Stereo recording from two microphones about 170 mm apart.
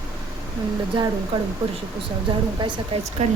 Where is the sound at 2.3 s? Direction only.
25° right (ahead or behind).